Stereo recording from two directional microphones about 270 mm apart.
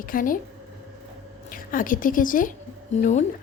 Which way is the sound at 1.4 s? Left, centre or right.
Left.